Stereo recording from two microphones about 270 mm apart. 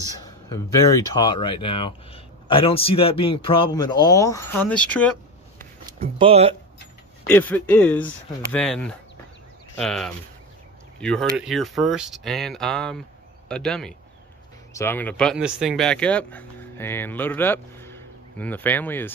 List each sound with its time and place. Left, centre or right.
0.0 s speech: centre
5.9 s speech: centre
7.2 s speech: centre